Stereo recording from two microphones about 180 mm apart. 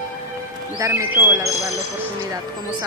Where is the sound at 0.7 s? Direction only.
15° right (ahead or behind).